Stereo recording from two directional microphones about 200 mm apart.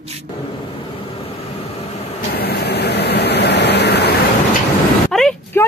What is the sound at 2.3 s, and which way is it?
Vehicle, 55° left (ahead or behind).